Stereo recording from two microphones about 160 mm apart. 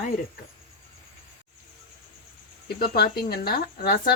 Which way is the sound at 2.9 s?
80° left.